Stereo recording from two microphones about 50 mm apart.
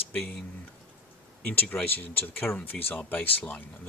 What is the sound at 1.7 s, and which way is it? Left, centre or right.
Speech, left.